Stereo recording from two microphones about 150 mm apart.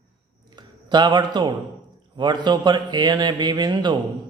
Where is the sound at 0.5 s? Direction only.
30° right (ahead or behind).